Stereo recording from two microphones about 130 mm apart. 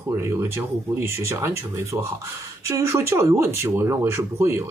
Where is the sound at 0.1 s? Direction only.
20° right (ahead or behind).